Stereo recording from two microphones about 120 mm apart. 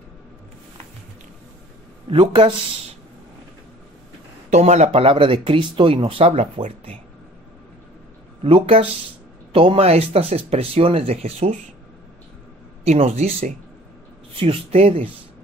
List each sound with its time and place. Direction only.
2.0 s speech: 45° right (ahead or behind)
4.5 s speech: 70° right (ahead or behind)
8.5 s speech: 50° right (ahead or behind)
12.8 s speech: 60° right (ahead or behind)